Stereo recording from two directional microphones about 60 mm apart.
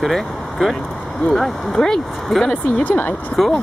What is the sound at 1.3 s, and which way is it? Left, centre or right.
Speech, centre.